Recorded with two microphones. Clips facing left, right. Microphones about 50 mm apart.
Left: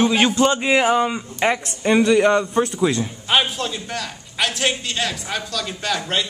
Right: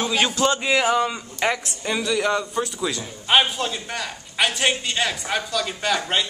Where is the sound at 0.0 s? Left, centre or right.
Left.